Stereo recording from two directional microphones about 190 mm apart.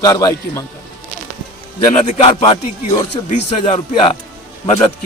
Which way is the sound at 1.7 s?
35° left (ahead or behind).